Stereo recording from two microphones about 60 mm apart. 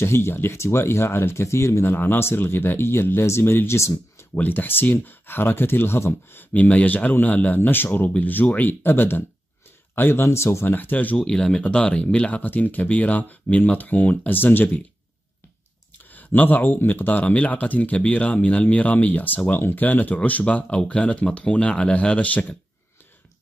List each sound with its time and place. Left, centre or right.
0.0 s speech: left
4.4 s speech: left
6.5 s speech: left
10.7 s speech: left
11.2 s speech: centre; by 14.8 s left
16.1 s speech: left